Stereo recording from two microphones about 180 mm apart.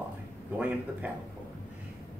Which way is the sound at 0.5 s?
10° right (ahead or behind).